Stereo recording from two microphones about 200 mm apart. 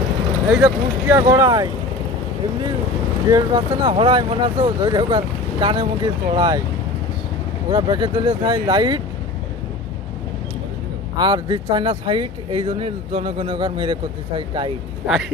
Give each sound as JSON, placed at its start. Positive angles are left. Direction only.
{"t": 0.6, "sound": "speech", "side_deg": -15}
{"t": 3.3, "sound": "speech", "side_deg": -20}
{"t": 7.7, "sound": "speech", "side_deg": -25}
{"t": 11.1, "sound": "speech", "side_deg": -20}
{"t": 15.0, "sound": "speech", "side_deg": 0}